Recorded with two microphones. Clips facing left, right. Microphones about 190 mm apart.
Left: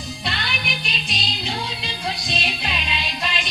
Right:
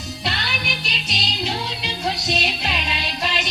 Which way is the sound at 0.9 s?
75° right (ahead or behind).